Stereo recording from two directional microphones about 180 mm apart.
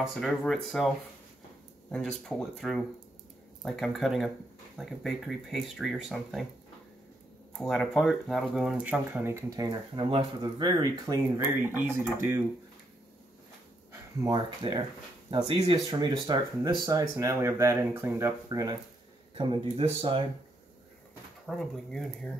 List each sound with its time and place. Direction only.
0.2 s speech: centre (ahead or behind)
1.9 s speech: 5° left (ahead or behind)
7.5 s speech: centre (ahead or behind)
14.2 s speech: 25° right (ahead or behind)
21.5 s speech: centre (ahead or behind)